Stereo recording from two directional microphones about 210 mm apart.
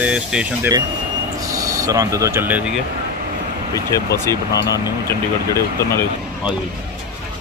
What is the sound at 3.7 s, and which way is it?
Speech, 15° left (ahead or behind).